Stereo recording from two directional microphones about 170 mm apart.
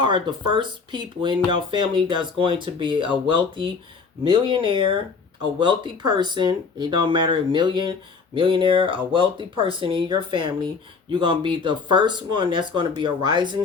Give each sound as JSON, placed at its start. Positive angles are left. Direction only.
{"t": 0.0, "sound": "speech", "side_deg": -30}